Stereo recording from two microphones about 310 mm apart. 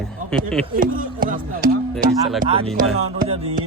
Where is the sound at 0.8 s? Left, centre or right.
Right.